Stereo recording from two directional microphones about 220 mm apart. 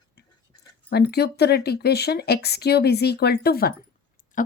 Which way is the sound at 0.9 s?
45° left (ahead or behind).